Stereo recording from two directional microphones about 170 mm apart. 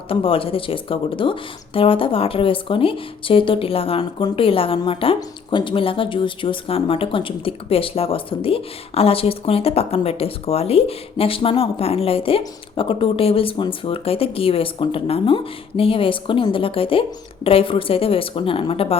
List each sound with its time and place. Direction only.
0.1 s speech: 30° left (ahead or behind)